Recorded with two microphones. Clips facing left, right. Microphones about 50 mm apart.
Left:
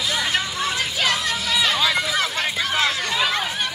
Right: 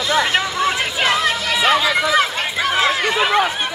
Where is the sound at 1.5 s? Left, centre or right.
Right.